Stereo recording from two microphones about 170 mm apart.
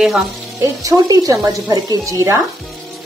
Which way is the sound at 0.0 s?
Centre (ahead or behind).